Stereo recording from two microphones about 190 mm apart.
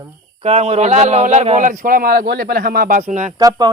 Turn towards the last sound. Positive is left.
turn(degrees=-20)  # may be behind; listen again after turning